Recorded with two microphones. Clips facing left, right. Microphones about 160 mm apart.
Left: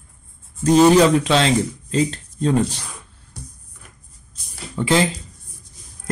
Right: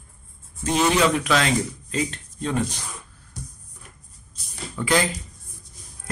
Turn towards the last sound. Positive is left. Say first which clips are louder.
# left 4 dB
turn(degrees=25)  # may be behind; listen again after turning